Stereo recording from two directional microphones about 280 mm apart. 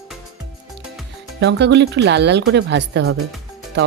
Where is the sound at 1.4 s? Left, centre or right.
Right.